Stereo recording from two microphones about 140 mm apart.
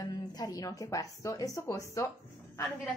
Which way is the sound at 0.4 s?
25° left (ahead or behind).